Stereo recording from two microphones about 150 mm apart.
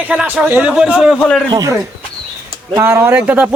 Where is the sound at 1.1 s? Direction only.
10° left (ahead or behind).